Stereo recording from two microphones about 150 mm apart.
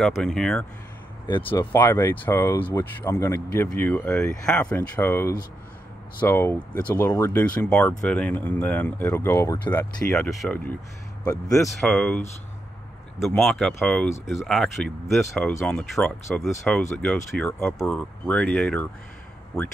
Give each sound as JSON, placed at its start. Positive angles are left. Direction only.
{"t": 0.0, "sound": "speech", "side_deg": 5}
{"t": 1.2, "sound": "speech", "side_deg": 30}
{"t": 1.5, "sound": "speech", "side_deg": 15}
{"t": 8.0, "sound": "speech", "side_deg": 10}
{"t": 10.1, "sound": "speech", "side_deg": 10}
{"t": 13.2, "sound": "speech", "side_deg": 0}
{"t": 16.3, "sound": "speech", "side_deg": 20}
{"t": 16.6, "sound": "speech", "side_deg": 5}